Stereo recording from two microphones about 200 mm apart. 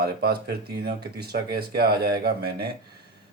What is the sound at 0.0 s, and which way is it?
Speech, 50° right (ahead or behind).